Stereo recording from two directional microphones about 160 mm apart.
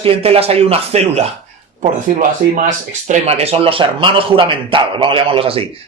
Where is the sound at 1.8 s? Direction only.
55° right (ahead or behind); by 5.6 s 35° right (ahead or behind).